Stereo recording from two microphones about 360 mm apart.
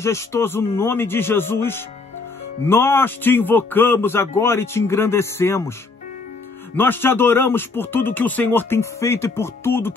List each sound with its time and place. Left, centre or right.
0.0 s a man's voice: centre
6.8 s a man's voice: centre